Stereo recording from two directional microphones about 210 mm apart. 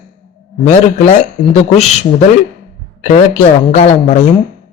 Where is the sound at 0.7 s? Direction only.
35° left (ahead or behind).